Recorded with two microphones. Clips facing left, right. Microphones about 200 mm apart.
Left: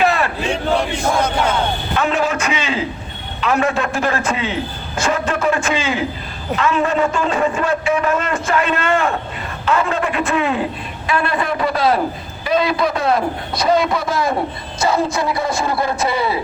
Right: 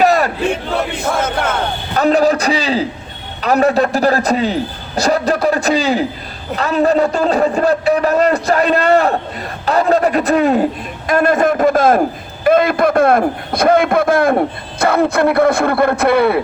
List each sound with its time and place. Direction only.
0.0 s battle cry: 40° right (ahead or behind)
2.0 s a sound: 40° right (ahead or behind)
3.4 s a man's voice: 40° right (ahead or behind); by 16.4 s 60° right (ahead or behind)